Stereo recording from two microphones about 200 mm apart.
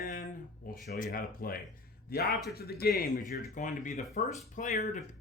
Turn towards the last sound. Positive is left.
turn(degrees=40)  # may be behind; listen again after turning